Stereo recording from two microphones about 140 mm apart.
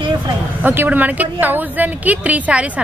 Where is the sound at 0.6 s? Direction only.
15° right (ahead or behind).